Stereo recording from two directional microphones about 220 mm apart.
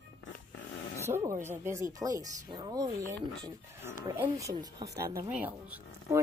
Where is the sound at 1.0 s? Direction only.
10° right (ahead or behind).